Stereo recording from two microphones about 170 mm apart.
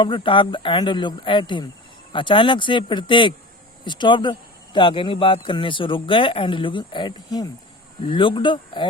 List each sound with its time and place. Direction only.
0.0 s speech: 30° left (ahead or behind)